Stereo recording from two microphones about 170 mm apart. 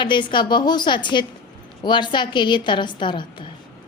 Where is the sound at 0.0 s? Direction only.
30° left (ahead or behind).